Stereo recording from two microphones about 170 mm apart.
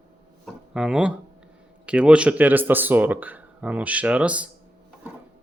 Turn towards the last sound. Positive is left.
turn(degrees=-5)  # may be behind; listen again after turning